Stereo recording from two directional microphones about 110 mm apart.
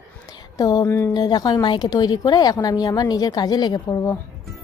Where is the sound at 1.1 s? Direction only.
35° left (ahead or behind).